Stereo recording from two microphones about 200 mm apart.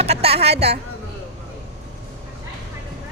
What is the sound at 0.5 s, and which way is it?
Speech, 55° right (ahead or behind).